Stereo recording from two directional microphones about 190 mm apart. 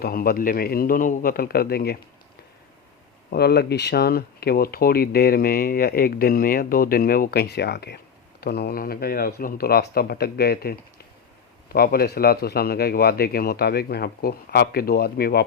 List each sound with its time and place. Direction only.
0.0 s speech: 50° left (ahead or behind)
3.2 s speech: 55° left (ahead or behind)